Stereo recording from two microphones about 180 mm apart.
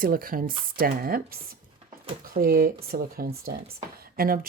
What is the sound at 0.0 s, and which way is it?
Speech, 50° right (ahead or behind).